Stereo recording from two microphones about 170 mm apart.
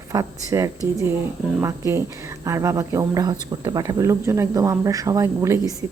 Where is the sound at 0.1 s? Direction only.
20° right (ahead or behind).